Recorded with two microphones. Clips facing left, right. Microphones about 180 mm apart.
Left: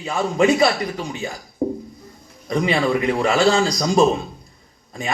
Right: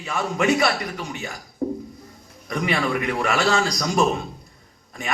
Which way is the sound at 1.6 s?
30° left (ahead or behind).